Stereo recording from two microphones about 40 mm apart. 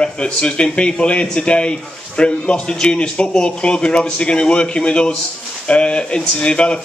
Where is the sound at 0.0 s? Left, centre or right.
Left.